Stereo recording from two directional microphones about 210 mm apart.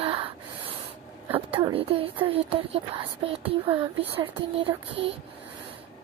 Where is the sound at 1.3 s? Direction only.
25° right (ahead or behind).